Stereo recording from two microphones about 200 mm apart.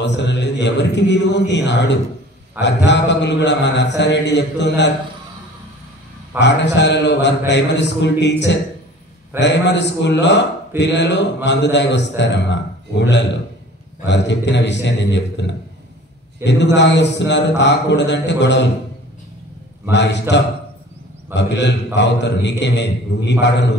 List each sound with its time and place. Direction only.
0.0 s a man's voice: 60° left (ahead or behind)
6.4 s a man's voice: 60° left (ahead or behind)
14.0 s a man's voice: 60° left (ahead or behind)
16.4 s a man's voice: 60° left (ahead or behind)
19.9 s a man's voice: 60° left (ahead or behind)